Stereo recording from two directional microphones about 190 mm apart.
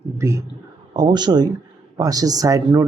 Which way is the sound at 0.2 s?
15° right (ahead or behind).